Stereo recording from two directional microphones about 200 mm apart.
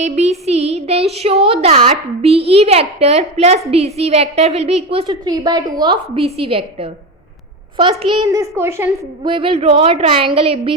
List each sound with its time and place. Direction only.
0.0 s a woman's voice: 35° right (ahead or behind); by 9.3 s 15° right (ahead or behind)
9.3 s a woman's voice: 30° right (ahead or behind)